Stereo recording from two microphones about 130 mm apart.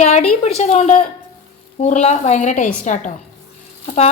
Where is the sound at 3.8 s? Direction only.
55° left (ahead or behind).